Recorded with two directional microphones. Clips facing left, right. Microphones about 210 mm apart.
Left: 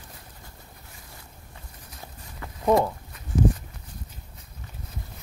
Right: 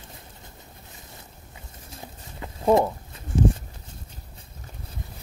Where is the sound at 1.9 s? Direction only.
25° right (ahead or behind).